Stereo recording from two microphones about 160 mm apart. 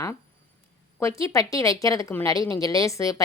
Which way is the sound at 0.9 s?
20° left (ahead or behind).